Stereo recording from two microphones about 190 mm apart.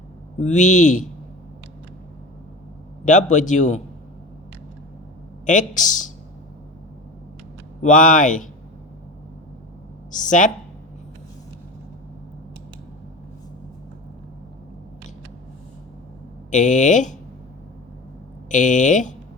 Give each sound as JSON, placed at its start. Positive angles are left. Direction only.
{"t": 0.3, "sound": "a man's voice", "side_deg": 40}
{"t": 3.0, "sound": "a man's voice", "side_deg": 40}
{"t": 5.5, "sound": "a man's voice", "side_deg": 40}
{"t": 7.8, "sound": "speech", "side_deg": 40}
{"t": 10.1, "sound": "speech", "side_deg": 40}
{"t": 16.5, "sound": "a man's voice", "side_deg": 40}
{"t": 18.4, "sound": "a man's voice", "side_deg": 40}